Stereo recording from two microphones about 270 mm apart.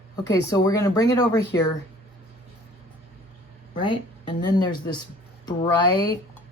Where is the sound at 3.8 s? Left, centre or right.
Centre.